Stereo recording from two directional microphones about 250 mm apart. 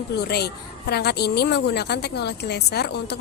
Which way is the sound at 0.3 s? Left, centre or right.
Left.